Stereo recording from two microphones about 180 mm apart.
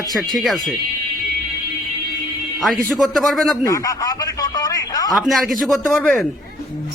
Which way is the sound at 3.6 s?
20° left (ahead or behind).